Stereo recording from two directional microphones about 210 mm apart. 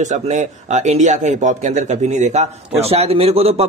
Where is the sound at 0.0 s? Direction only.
35° right (ahead or behind).